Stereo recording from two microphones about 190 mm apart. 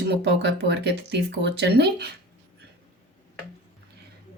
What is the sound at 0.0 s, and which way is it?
Speech, 60° right (ahead or behind).